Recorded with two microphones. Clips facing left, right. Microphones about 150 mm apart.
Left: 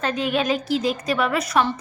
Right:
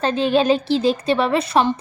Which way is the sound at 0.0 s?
30° right (ahead or behind).